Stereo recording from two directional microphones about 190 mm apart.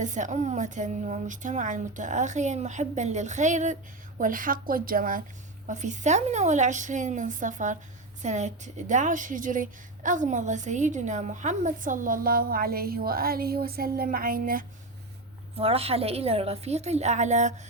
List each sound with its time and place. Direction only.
0.0 s a woman's voice: 40° right (ahead or behind)
15.5 s a woman's voice: 30° right (ahead or behind)